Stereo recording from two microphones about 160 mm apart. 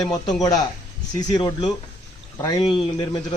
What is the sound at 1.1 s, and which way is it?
Speech, 25° left (ahead or behind).